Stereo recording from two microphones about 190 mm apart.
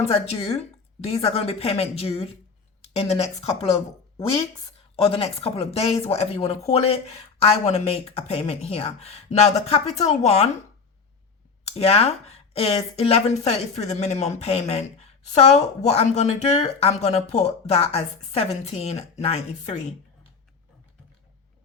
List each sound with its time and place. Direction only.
0.0 s speech: 30° left (ahead or behind)
4.9 s speech: 30° left (ahead or behind)
11.6 s speech: 30° left (ahead or behind)